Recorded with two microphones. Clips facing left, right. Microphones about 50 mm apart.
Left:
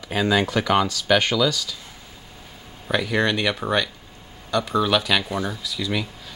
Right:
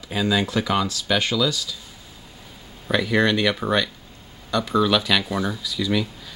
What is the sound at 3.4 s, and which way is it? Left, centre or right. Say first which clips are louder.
Speech: right 1 dB; centre.